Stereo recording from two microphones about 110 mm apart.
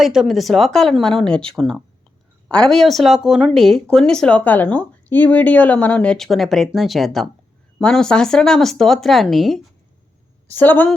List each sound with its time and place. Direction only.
0.0 s speech: 5° right (ahead or behind)
10.5 s a woman's voice: 15° left (ahead or behind)